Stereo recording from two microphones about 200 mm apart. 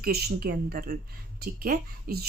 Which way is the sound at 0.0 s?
50° right (ahead or behind).